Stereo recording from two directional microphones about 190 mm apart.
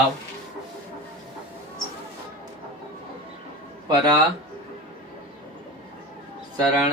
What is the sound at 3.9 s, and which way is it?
Speech, 20° right (ahead or behind).